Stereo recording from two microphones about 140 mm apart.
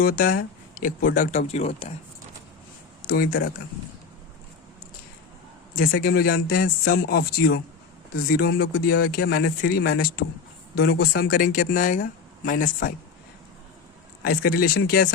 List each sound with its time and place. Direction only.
0.0 s speech: 85° left; by 1.9 s 45° left (ahead or behind)
3.1 s speech: 90° left
5.7 s speech: 90° left; by 12.9 s 75° left (ahead or behind)
14.3 s speech: 90° left